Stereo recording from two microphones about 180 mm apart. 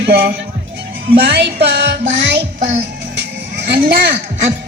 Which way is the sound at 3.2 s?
65° right (ahead or behind).